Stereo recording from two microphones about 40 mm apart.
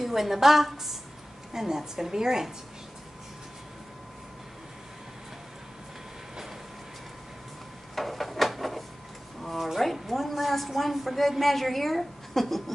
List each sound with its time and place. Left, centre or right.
0.0 s a woman's voice: centre
7.9 s a sound: centre
9.8 s a woman's voice: centre